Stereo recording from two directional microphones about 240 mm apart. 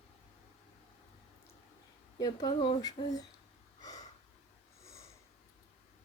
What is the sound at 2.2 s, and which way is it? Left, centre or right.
Speech, centre.